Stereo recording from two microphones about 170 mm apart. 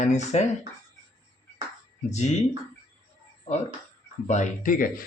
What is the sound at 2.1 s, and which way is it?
Speech, 40° left (ahead or behind).